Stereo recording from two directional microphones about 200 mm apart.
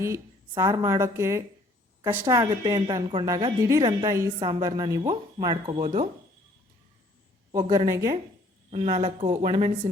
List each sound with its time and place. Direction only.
0.0 s a woman's voice: 15° right (ahead or behind)
7.5 s a woman's voice: 20° right (ahead or behind)
8.7 s speech: 30° right (ahead or behind)
9.4 s speech: 40° right (ahead or behind)